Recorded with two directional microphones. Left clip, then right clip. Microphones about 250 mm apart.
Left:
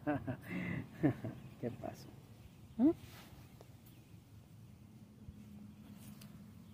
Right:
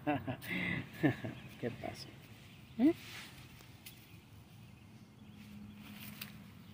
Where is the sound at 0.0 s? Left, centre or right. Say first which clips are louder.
Right 2 dB; centre.